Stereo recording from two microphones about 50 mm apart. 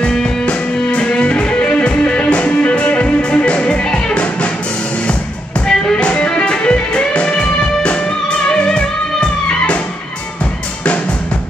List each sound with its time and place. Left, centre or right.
0.0 s music: centre
5.7 s music: centre